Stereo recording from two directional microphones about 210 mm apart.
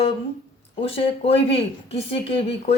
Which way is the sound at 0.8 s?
25° left (ahead or behind).